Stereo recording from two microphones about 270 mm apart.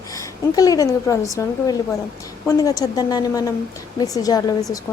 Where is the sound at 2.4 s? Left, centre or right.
Centre.